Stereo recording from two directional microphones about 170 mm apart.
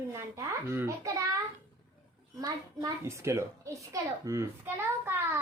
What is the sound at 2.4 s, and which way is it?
Speech, 15° right (ahead or behind).